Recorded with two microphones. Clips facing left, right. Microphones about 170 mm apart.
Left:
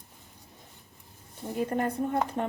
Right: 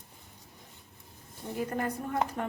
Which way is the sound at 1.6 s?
25° left (ahead or behind).